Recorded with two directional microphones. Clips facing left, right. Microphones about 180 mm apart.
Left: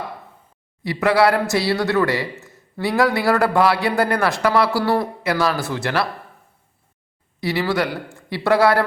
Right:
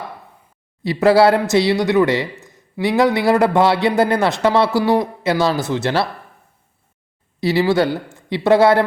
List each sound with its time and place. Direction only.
0.9 s a man's voice: 25° right (ahead or behind)
7.4 s a man's voice: 25° right (ahead or behind)